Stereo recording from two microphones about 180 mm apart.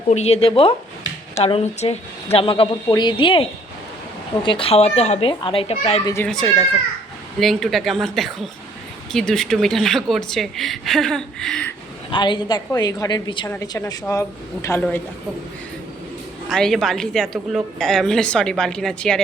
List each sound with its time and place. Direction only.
0.1 s a woman's voice: 35° left (ahead or behind)
5.3 s speech: 25° left (ahead or behind)
6.2 s speech: centre (ahead or behind)
12.1 s a woman's voice: 25° left (ahead or behind)
16.5 s speech: centre (ahead or behind)